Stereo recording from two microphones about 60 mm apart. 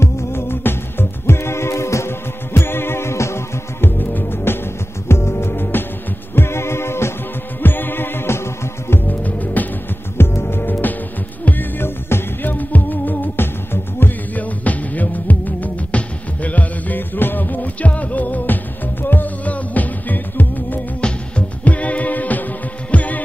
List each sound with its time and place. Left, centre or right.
0.0 s music: left
4.1 s music: left
7.6 s music: left
9.2 s music: left
10.1 s music: left